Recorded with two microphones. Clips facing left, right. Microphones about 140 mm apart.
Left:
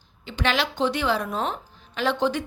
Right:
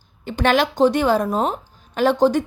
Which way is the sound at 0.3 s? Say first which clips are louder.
Right 7 dB; 50° right (ahead or behind).